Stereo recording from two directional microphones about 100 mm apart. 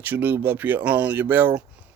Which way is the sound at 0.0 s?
20° right (ahead or behind).